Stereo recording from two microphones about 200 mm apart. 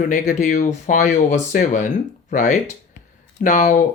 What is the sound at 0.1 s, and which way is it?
Speech, 40° left (ahead or behind).